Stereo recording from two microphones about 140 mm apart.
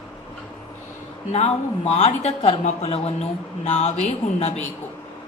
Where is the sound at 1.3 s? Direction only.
50° left (ahead or behind).